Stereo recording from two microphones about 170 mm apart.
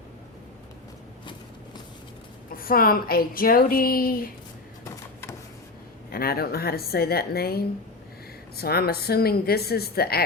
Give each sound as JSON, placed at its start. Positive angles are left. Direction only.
{"t": 1.2, "sound": "a sound", "side_deg": 25}
{"t": 2.6, "sound": "a woman's voice", "side_deg": 60}
{"t": 6.1, "sound": "a woman's voice", "side_deg": 60}